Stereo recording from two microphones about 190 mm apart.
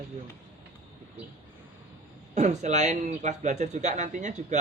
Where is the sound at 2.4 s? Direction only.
40° right (ahead or behind).